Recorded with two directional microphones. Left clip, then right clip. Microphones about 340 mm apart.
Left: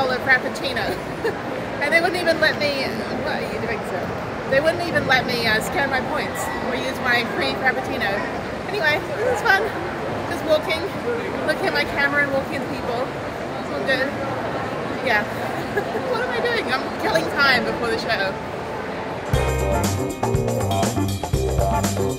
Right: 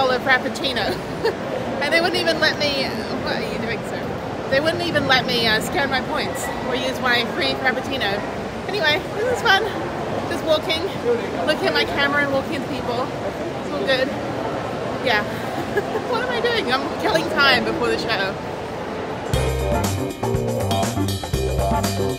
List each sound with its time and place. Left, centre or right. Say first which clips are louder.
0.0 s speech: right 1 dB; centre
4.5 s speech: left 1 dB; centre
11.4 s speech: right 2 dB; centre
16.1 s speech: right 1 dB; centre